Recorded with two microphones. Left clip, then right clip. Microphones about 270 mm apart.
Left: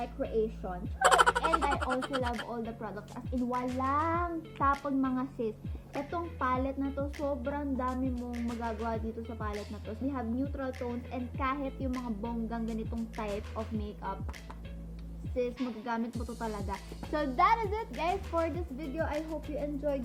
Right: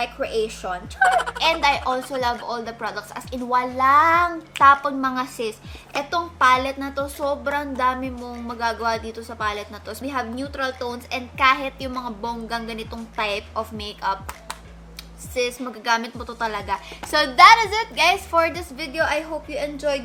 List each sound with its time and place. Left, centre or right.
0.0 s speech: centre
2.5 s speech: centre
2.8 s a woman's voice: centre
3.4 s a woman's voice: centre
5.1 s speech: centre
7.0 s speech: right
7.5 s a woman's voice: centre
8.9 s a woman's voice: centre
10.7 s speech: right
11.1 s speech: centre
12.0 s speech: centre
12.5 s a woman's voice: centre
15.8 s a woman's voice: centre